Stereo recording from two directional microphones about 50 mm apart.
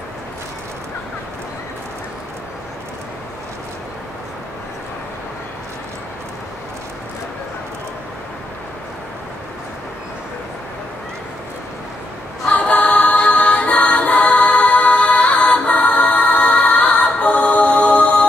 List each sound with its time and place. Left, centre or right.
12.4 s music: left